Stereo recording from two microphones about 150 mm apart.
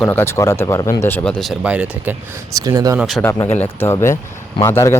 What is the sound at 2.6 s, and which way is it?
Speech, 25° right (ahead or behind).